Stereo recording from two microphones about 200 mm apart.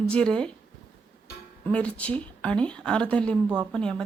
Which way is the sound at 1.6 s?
5° left (ahead or behind).